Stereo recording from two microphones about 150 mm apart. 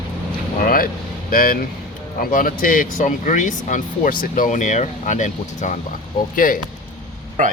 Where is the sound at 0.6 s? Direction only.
70° left (ahead or behind).